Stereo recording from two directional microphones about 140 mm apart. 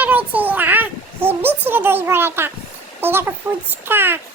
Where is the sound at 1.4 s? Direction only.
15° right (ahead or behind).